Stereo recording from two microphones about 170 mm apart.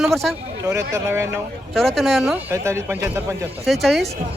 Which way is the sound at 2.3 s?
15° right (ahead or behind).